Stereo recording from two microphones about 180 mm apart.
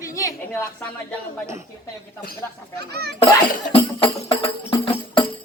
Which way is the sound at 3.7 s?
30° left (ahead or behind).